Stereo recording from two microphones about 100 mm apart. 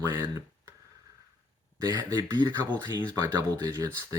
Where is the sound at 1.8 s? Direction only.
40° right (ahead or behind).